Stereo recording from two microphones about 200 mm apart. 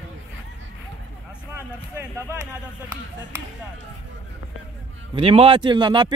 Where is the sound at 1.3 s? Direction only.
10° right (ahead or behind).